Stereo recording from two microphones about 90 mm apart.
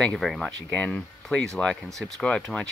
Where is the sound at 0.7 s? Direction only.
10° left (ahead or behind).